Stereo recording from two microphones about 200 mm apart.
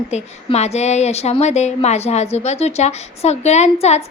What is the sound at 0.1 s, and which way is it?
Speech, 35° left (ahead or behind).